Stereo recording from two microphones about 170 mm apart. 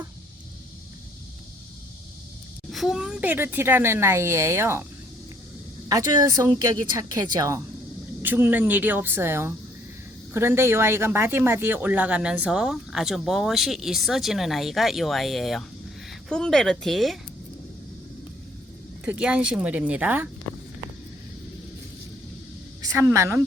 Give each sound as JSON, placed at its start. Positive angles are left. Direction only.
{"t": 2.7, "sound": "a woman's voice", "side_deg": -5}
{"t": 5.9, "sound": "a woman's voice", "side_deg": -20}
{"t": 19.0, "sound": "a woman's voice", "side_deg": -5}
{"t": 22.8, "sound": "a woman's voice", "side_deg": -15}